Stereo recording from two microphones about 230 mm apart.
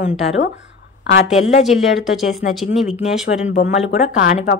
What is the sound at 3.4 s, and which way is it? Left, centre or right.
Speech, left.